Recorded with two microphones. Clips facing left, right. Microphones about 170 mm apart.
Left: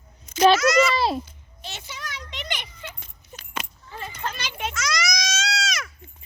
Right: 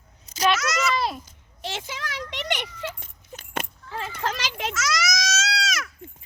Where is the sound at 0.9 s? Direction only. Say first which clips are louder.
Left 3 dB; 30° left (ahead or behind).